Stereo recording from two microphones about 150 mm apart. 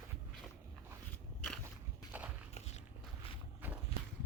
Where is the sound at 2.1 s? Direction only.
10° right (ahead or behind).